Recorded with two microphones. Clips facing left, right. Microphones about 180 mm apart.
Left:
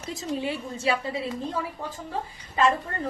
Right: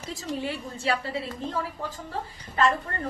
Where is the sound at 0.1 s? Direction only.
20° left (ahead or behind).